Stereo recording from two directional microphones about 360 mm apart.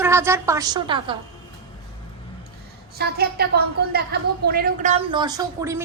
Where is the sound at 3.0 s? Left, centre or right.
Right; by 5.8 s centre.